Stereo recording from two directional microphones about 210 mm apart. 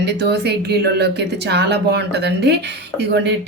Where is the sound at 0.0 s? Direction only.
50° right (ahead or behind).